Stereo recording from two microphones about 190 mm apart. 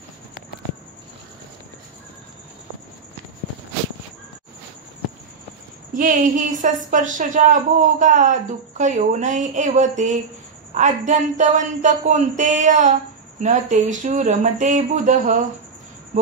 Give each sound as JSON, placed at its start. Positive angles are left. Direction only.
{"t": 5.9, "sound": "a woman's voice", "side_deg": -40}